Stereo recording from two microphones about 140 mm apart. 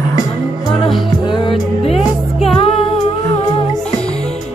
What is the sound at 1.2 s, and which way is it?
Music, 35° left (ahead or behind).